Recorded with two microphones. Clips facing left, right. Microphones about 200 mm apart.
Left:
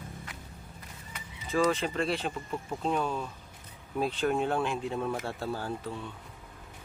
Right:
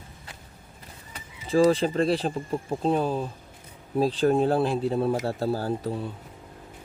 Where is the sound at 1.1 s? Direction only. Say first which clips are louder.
Right 7 dB; 30° right (ahead or behind).